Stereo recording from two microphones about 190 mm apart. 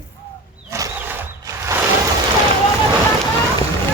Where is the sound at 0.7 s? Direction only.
15° right (ahead or behind).